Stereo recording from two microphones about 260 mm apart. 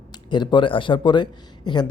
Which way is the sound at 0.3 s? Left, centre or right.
Centre.